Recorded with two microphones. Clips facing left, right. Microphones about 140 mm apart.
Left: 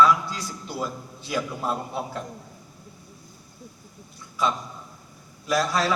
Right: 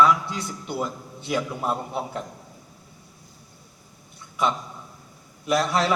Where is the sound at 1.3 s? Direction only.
20° right (ahead or behind).